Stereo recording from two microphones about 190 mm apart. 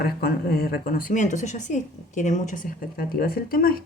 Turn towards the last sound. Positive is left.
turn(degrees=50)  # may be behind; listen again after turning